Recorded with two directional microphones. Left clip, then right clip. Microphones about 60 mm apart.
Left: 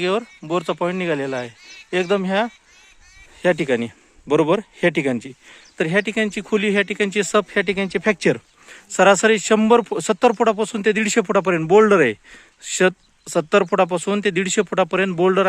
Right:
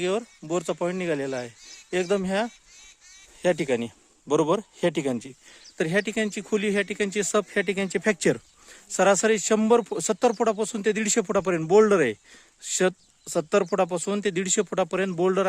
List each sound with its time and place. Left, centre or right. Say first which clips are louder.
0.0 s a man's voice: left 6 dB; centre; by 2.5 s right
3.4 s a man's voice: left 5 dB; right
5.7 s speech: left 5 dB; right
6.3 s a man's voice: left 6 dB; right
7.4 s speech: left 5 dB; right
7.9 s speech: left 5 dB; right
8.7 s speech: left 7 dB; centre
13.2 s speech: left 6 dB; centre